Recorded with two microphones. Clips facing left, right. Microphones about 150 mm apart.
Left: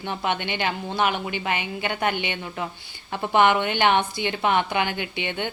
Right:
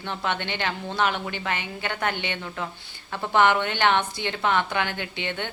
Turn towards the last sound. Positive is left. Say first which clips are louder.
# left 2 dB
turn(degrees=15)  # may be behind; listen again after turning